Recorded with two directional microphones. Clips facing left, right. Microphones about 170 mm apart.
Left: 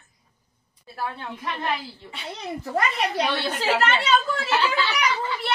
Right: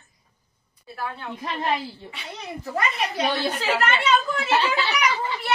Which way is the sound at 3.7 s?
35° left (ahead or behind).